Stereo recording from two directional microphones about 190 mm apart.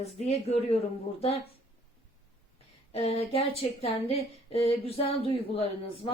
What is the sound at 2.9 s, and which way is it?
Speech, 30° left (ahead or behind).